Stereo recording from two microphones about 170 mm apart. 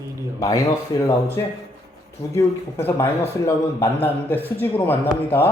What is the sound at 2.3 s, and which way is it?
Speech, 15° left (ahead or behind).